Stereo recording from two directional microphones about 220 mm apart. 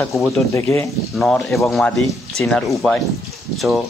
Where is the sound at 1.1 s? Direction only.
Centre (ahead or behind).